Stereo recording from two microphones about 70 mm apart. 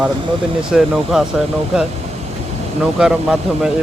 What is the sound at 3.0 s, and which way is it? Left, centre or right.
Speech, centre.